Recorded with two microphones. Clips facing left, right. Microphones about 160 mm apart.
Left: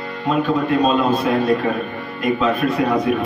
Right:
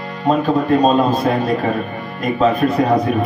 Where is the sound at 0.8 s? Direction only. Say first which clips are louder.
Right 3 dB; 40° right (ahead or behind).